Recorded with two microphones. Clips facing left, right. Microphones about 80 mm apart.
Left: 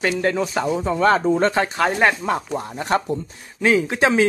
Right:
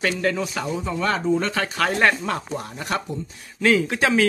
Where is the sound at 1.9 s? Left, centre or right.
Centre; by 3.0 s left.